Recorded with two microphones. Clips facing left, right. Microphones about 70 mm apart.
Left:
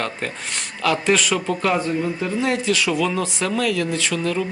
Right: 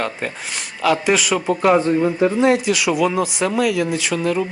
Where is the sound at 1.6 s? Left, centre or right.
Right.